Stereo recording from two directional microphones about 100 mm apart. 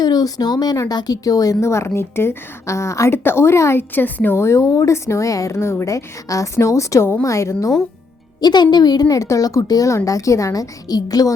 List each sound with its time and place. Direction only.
0.0 s speech: 40° left (ahead or behind)
8.4 s speech: 45° left (ahead or behind)